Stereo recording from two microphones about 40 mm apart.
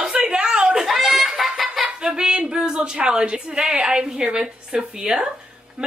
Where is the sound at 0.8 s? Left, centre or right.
Centre.